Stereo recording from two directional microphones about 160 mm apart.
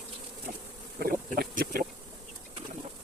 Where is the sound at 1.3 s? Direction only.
70° right (ahead or behind).